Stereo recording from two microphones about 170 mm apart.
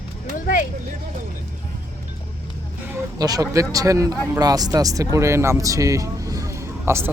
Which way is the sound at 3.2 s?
20° right (ahead or behind).